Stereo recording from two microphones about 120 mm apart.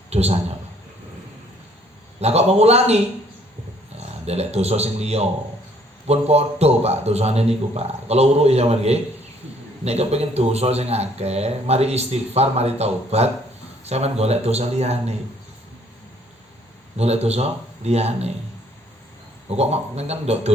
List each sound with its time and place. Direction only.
0.1 s a man's voice: 60° right (ahead or behind)
2.2 s a man's voice: 60° right (ahead or behind)
4.3 s a man's voice: 60° right (ahead or behind)
17.0 s a man's voice: 60° right (ahead or behind)
19.5 s a man's voice: 60° right (ahead or behind)